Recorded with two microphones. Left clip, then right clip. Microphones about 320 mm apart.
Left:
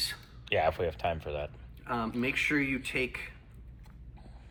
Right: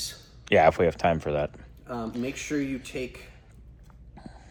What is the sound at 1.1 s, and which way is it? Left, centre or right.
Speech, right.